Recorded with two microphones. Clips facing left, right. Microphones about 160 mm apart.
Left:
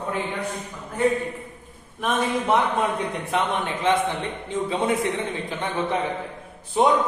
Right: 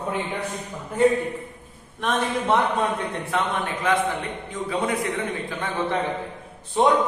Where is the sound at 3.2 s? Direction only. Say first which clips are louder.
Left 1 dB; 20° left (ahead or behind).